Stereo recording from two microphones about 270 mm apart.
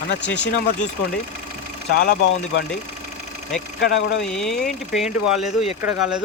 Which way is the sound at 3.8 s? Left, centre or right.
Left.